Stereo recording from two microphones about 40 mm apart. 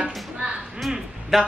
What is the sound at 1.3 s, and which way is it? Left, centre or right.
Speech, centre.